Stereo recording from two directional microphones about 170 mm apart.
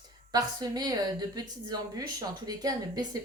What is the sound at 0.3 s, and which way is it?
A woman's voice, 20° right (ahead or behind).